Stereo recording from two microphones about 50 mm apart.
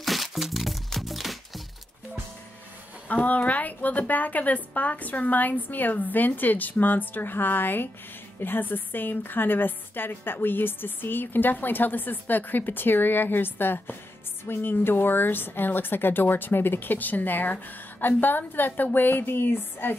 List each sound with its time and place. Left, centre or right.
0.0 s music: centre
3.1 s a woman's voice: left
18.7 s a woman's voice: left
18.9 s a woman's voice: left